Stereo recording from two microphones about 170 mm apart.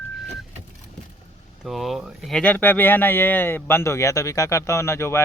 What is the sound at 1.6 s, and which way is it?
Speech, centre (ahead or behind).